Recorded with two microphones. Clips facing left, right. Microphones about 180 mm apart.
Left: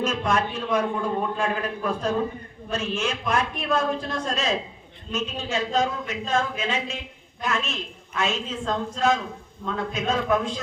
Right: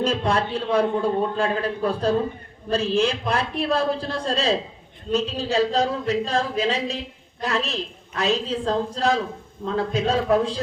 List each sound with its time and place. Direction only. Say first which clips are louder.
0.0 s a man's voice: right 2 dB; 30° right (ahead or behind)